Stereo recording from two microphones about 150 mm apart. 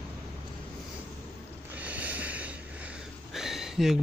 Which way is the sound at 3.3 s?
5° right (ahead or behind).